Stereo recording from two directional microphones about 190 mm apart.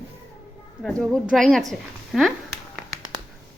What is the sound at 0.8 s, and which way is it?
A woman's voice, 5° left (ahead or behind).